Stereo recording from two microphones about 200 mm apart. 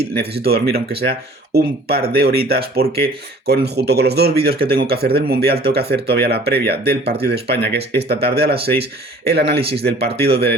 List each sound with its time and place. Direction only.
0.1 s speech: 50° right (ahead or behind)